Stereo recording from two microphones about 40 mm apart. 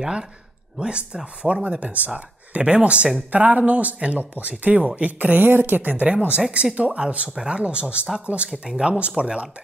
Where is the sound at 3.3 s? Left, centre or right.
Right.